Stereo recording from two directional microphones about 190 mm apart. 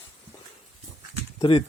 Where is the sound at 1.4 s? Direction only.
25° left (ahead or behind).